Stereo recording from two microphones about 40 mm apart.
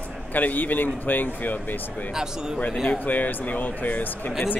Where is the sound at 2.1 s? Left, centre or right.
Centre.